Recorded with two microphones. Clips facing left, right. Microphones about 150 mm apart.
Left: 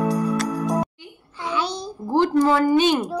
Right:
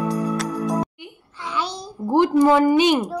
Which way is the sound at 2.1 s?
15° right (ahead or behind).